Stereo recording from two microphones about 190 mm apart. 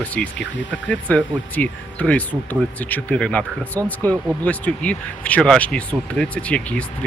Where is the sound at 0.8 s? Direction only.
10° left (ahead or behind).